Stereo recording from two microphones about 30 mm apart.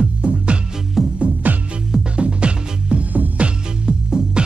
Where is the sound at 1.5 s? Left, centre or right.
Right.